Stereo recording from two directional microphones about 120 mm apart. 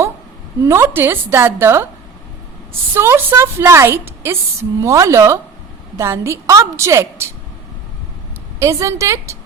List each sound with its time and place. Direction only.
0.6 s a woman's voice: 20° right (ahead or behind)
2.9 s a woman's voice: 20° right (ahead or behind)
8.5 s a woman's voice: 25° right (ahead or behind)